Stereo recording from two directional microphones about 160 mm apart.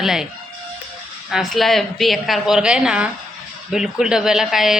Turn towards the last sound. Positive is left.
turn(degrees=0)  # may be behind; listen again after turning